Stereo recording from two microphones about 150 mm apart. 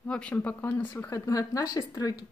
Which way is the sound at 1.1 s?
20° left (ahead or behind).